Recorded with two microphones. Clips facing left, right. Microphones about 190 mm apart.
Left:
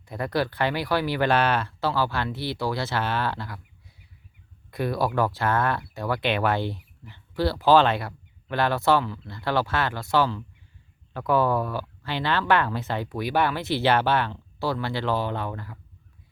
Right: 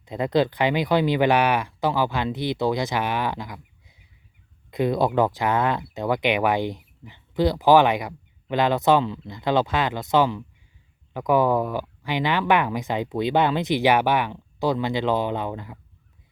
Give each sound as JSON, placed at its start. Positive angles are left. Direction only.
{"t": 0.0, "sound": "speech", "side_deg": -20}